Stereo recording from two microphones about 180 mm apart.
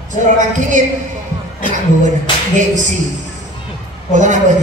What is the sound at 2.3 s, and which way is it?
Music, 25° left (ahead or behind).